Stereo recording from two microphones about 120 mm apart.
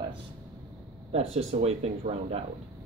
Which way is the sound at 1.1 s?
60° right (ahead or behind).